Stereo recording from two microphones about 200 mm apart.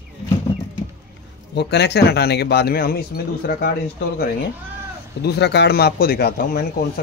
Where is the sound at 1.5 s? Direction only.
60° left (ahead or behind).